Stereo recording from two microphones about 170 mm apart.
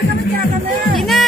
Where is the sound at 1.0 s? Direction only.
Centre (ahead or behind).